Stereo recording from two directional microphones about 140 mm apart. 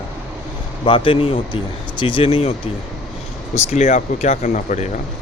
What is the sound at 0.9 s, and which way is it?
Speech, 40° left (ahead or behind).